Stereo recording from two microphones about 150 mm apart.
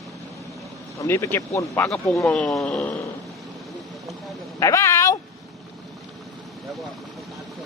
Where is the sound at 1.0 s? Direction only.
15° left (ahead or behind).